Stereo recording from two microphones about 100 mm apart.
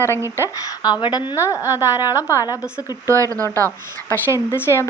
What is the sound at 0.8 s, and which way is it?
Speech, 45° left (ahead or behind).